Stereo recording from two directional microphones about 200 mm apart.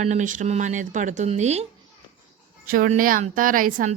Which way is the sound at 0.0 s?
35° right (ahead or behind).